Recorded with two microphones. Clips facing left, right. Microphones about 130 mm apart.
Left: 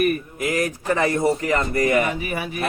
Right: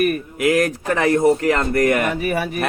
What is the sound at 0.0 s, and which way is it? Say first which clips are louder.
A man's voice: right 3 dB; 60° right (ahead or behind).